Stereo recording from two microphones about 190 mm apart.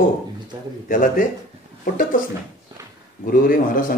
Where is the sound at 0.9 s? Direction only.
45° left (ahead or behind).